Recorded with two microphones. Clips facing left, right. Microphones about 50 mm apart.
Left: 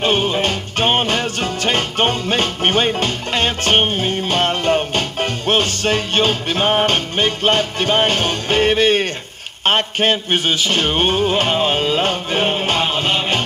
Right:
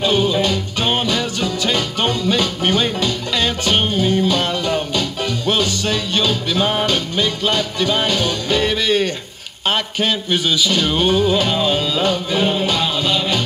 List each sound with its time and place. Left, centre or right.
0.0 s music: left